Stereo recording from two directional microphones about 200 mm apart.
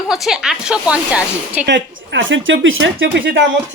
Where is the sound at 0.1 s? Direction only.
Centre (ahead or behind).